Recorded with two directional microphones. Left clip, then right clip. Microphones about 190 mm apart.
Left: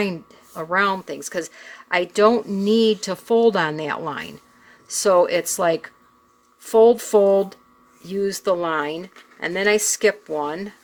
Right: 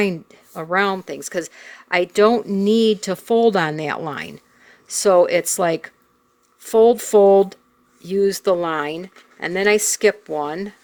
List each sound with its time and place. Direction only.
0.0 s speech: 30° right (ahead or behind)